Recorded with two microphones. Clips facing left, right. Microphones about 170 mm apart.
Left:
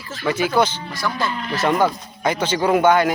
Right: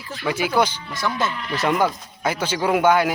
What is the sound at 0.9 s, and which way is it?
Speech, 20° right (ahead or behind).